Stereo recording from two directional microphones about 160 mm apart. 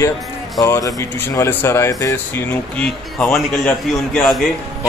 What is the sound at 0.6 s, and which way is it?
Speech, 20° left (ahead or behind).